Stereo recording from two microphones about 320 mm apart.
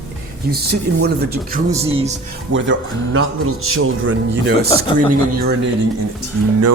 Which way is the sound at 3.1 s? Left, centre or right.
Right.